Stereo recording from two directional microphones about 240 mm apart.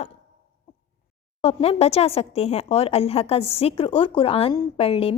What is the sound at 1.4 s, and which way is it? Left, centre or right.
A woman's voice, left.